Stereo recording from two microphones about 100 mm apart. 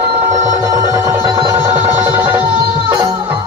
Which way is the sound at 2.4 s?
55° right (ahead or behind).